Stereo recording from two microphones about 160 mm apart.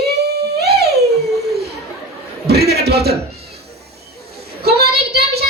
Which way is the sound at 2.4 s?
90° right.